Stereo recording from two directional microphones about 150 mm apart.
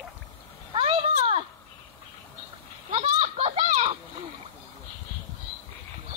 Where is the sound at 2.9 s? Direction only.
40° right (ahead or behind).